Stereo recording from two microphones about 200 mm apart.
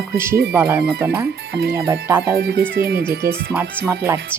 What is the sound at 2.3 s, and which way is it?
Speech, 50° right (ahead or behind).